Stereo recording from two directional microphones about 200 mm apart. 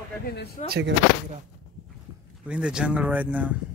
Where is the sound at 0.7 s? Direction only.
55° right (ahead or behind).